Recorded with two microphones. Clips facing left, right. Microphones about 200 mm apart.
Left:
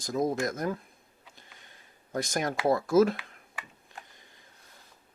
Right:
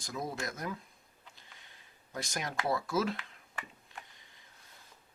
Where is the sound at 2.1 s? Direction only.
45° left (ahead or behind).